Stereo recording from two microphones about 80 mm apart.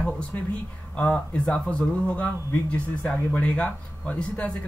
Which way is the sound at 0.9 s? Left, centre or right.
Centre.